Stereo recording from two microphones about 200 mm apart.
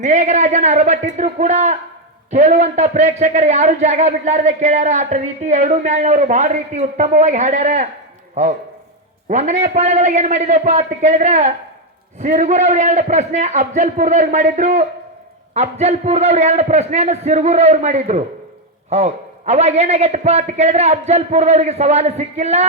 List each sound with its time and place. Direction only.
0.0 s a man's voice: 35° right (ahead or behind)
9.3 s a man's voice: 35° right (ahead or behind)